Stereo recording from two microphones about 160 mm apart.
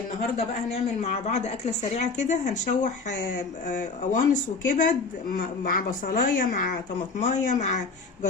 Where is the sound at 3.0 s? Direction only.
90° left.